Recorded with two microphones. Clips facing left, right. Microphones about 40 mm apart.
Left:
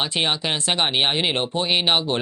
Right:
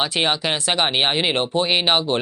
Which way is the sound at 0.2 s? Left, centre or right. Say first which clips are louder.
Right 1 dB; right.